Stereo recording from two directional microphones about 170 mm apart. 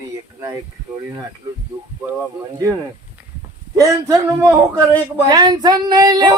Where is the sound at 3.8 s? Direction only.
20° right (ahead or behind).